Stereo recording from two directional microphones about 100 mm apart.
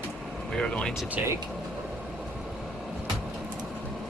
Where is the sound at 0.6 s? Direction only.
10° left (ahead or behind).